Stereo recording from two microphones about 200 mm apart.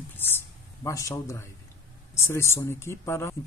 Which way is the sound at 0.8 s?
15° left (ahead or behind).